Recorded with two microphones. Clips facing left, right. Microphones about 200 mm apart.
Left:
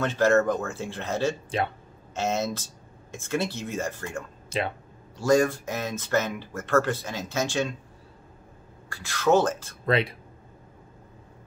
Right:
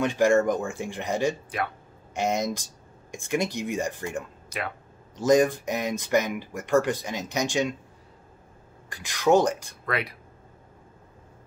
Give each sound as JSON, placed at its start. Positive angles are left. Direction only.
{"t": 0.0, "sound": "speech", "side_deg": -15}
{"t": 4.5, "sound": "speech", "side_deg": 25}
{"t": 5.1, "sound": "speech", "side_deg": -20}
{"t": 8.8, "sound": "speech", "side_deg": -20}
{"t": 9.8, "sound": "speech", "side_deg": 25}